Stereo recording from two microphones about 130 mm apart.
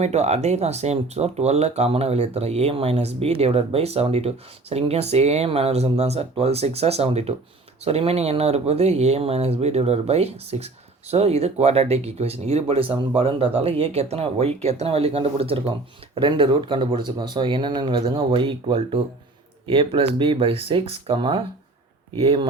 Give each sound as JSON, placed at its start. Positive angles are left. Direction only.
{"t": 0.0, "sound": "speech", "side_deg": -60}